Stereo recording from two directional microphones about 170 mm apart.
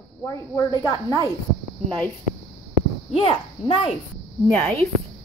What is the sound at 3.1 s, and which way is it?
Speech, 30° left (ahead or behind).